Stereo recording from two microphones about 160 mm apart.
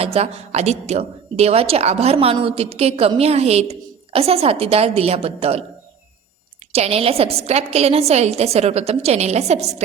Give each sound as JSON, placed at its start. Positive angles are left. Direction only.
{"t": 0.0, "sound": "a woman's voice", "side_deg": -40}
{"t": 6.7, "sound": "a woman's voice", "side_deg": -40}